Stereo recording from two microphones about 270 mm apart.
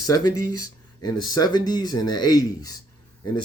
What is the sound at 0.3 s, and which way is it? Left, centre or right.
Speech, left.